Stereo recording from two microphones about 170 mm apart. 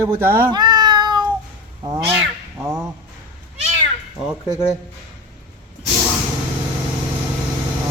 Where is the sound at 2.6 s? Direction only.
15° right (ahead or behind).